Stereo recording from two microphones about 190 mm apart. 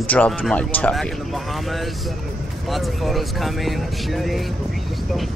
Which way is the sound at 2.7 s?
Centre (ahead or behind).